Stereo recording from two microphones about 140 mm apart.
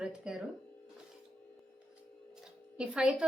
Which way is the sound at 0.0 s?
5° right (ahead or behind).